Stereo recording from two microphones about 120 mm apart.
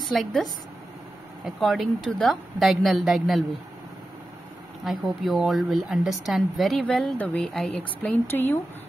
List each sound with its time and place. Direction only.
0.0 s a woman's voice: centre (ahead or behind)
4.8 s a woman's voice: centre (ahead or behind)
8.0 s speech: 15° left (ahead or behind)